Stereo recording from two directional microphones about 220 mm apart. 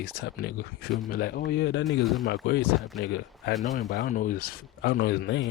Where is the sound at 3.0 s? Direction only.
50° left (ahead or behind).